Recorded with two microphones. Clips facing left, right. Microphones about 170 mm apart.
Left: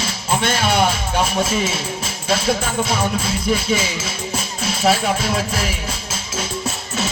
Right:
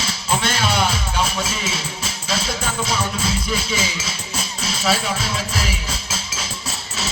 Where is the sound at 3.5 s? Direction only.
50° left (ahead or behind).